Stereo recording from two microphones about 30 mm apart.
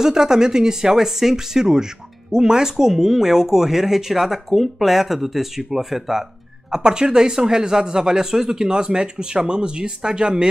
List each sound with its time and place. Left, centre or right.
0.0 s speech: centre
6.7 s speech: right